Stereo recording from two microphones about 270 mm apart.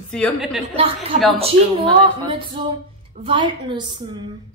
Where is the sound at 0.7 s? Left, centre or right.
Right.